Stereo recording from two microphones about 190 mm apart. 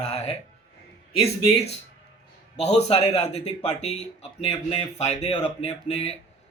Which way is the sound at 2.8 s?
35° left (ahead or behind).